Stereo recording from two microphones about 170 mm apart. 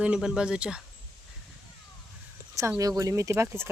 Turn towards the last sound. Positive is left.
turn(degrees=-15)  # may be behind; listen again after turning